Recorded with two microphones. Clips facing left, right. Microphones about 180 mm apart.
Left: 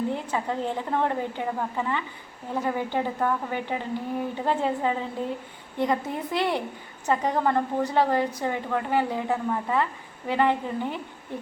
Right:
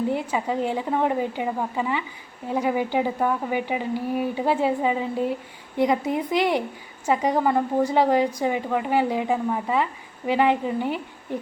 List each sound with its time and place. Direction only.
0.1 s a woman's voice: 10° right (ahead or behind)